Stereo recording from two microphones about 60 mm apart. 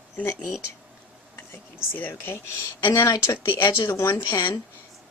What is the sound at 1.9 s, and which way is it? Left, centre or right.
Speech, left.